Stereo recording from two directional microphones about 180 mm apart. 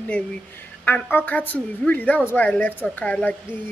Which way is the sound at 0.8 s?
10° left (ahead or behind).